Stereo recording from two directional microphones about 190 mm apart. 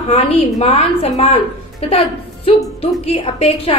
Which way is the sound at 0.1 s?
30° left (ahead or behind).